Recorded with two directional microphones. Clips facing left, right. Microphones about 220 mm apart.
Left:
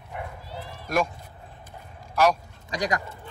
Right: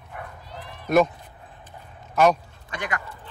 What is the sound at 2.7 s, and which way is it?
Speech, 35° left (ahead or behind).